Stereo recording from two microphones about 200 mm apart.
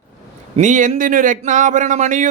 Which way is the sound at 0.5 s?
40° right (ahead or behind).